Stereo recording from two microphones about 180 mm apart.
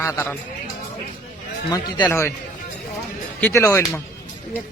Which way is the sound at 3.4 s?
15° left (ahead or behind).